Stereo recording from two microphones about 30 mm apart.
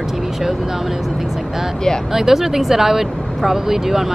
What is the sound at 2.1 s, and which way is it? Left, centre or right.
Speech, centre.